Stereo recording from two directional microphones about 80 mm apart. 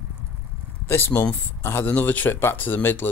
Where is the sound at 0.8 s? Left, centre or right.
Left.